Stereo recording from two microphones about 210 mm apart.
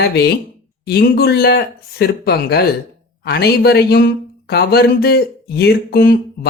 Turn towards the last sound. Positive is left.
turn(degrees=45)  # may be behind; listen again after turning